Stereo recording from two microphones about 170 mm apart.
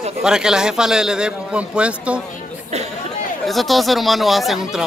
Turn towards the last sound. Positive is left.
turn(degrees=0)  # may be behind; listen again after turning